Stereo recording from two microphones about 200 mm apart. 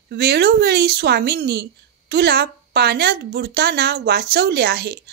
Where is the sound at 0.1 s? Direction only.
55° right (ahead or behind).